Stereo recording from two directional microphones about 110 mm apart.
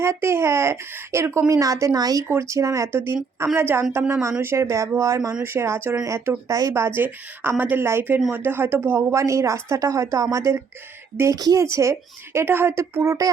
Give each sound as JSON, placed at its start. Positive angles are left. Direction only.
{"t": 0.0, "sound": "a woman's voice", "side_deg": -25}